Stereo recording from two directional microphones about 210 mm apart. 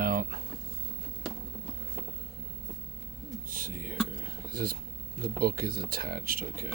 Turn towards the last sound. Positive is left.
turn(degrees=-45)  # may be behind; listen again after turning